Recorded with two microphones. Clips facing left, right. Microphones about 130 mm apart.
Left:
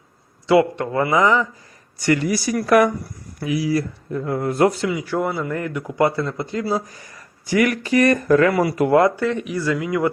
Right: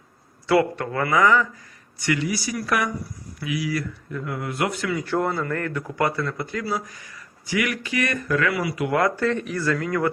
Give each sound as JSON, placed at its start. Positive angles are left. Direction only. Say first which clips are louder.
{"t": 0.4, "sound": "a man's voice", "louder": "left 4 dB", "side_deg": 20}
{"t": 2.0, "sound": "speech", "louder": "left 5 dB", "side_deg": 45}
{"t": 3.4, "sound": "speech", "louder": "left 6 dB", "side_deg": 35}
{"t": 5.0, "sound": "speech", "louder": "right 1 dB", "side_deg": 5}
{"t": 5.3, "sound": "speech", "louder": "left 2 dB", "side_deg": 15}
{"t": 8.9, "sound": "a man's voice", "louder": "left 6 dB", "side_deg": 25}
{"t": 9.1, "sound": "speech", "louder": "left 2 dB", "side_deg": 10}